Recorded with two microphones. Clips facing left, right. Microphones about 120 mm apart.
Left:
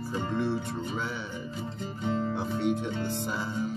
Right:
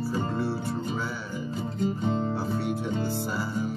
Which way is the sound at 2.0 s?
25° right (ahead or behind).